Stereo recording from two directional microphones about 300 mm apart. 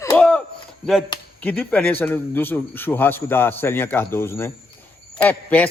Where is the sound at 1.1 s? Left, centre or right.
Centre.